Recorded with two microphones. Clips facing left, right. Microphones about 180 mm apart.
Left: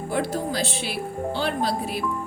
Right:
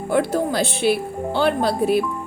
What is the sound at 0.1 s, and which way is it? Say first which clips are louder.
A woman's voice: right 7 dB; 60° right (ahead or behind).